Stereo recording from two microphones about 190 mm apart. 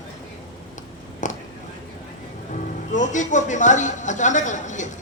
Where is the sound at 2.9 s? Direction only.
40° left (ahead or behind).